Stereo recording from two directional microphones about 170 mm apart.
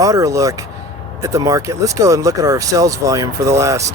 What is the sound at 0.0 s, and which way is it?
Speech, 20° right (ahead or behind).